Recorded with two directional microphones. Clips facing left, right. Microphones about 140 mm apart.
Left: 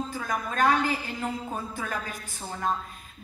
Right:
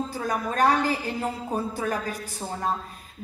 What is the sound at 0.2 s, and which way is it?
Speech, 35° right (ahead or behind).